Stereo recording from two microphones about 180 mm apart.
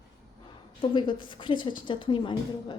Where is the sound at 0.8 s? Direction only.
25° left (ahead or behind).